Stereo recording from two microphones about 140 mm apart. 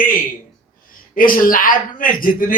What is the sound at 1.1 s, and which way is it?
Speech, 85° left.